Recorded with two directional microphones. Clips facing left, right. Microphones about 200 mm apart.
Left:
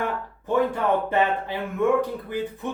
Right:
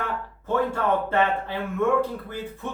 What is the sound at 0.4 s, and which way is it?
Speech, 15° left (ahead or behind).